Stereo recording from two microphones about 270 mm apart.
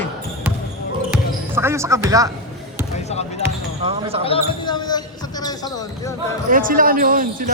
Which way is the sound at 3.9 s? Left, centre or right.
Right.